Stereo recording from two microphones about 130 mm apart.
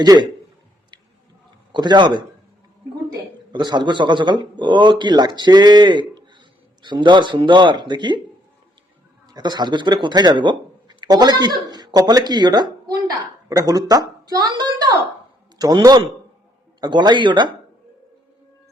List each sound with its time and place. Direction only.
0.0 s a man's voice: 30° right (ahead or behind)
1.7 s a man's voice: 35° right (ahead or behind)
9.3 s a man's voice: 35° right (ahead or behind)